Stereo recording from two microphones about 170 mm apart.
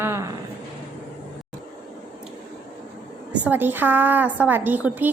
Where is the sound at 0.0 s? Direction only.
15° right (ahead or behind).